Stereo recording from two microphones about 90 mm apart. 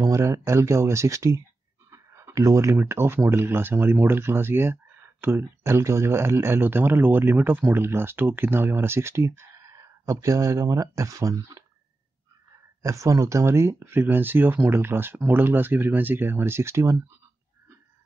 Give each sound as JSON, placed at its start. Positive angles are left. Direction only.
{"t": 0.0, "sound": "speech", "side_deg": -35}
{"t": 12.8, "sound": "speech", "side_deg": -35}